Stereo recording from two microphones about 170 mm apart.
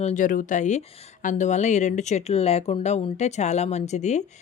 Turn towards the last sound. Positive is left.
turn(degrees=45)  # may be behind; listen again after turning